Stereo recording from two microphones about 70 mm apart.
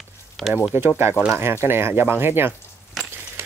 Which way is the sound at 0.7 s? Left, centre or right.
Right.